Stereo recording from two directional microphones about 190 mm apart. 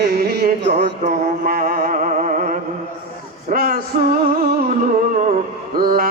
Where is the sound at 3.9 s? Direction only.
35° right (ahead or behind).